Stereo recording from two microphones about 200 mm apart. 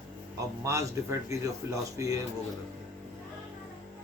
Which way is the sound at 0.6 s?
15° right (ahead or behind).